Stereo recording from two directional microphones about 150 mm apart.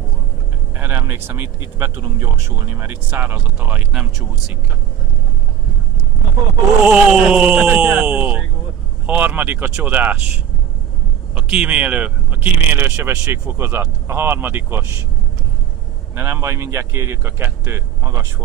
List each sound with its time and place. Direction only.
0.7 s speech: 15° right (ahead or behind)
6.8 s speech: 5° right (ahead or behind)
11.3 s speech: 10° right (ahead or behind)
16.2 s speech: 15° right (ahead or behind)